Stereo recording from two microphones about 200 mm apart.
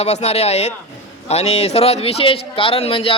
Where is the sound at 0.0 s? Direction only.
30° left (ahead or behind).